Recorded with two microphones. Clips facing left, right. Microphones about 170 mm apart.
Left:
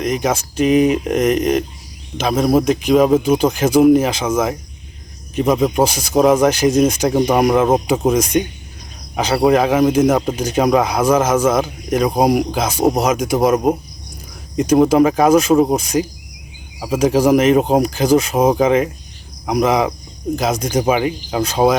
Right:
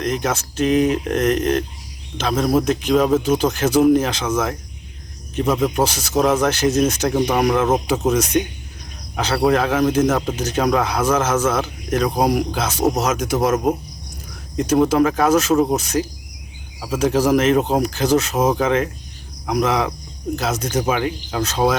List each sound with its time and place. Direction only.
0.0 s speech: 10° left (ahead or behind)